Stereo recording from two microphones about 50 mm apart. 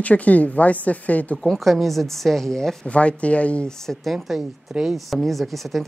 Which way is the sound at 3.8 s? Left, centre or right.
Centre.